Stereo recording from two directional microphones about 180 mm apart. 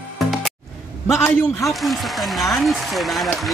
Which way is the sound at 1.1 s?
15° left (ahead or behind).